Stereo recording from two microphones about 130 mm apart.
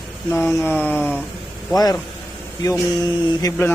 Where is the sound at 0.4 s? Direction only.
20° left (ahead or behind).